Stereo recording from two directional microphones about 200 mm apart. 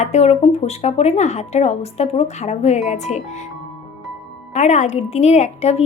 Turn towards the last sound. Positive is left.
turn(degrees=30)  # may be behind; listen again after turning